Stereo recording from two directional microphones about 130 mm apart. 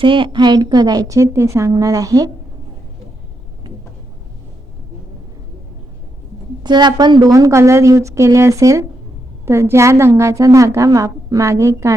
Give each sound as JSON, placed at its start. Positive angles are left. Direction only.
{"t": 0.0, "sound": "a woman's voice", "side_deg": -40}
{"t": 6.6, "sound": "a woman's voice", "side_deg": -35}